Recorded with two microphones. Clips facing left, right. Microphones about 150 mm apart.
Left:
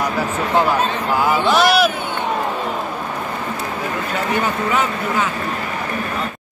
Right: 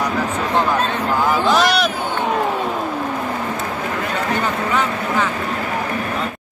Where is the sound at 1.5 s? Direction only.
5° left (ahead or behind).